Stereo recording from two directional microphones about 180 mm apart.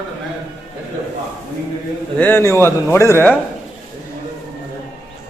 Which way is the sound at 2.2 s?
10° left (ahead or behind).